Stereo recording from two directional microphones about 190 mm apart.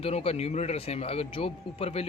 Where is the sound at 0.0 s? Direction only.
30° left (ahead or behind).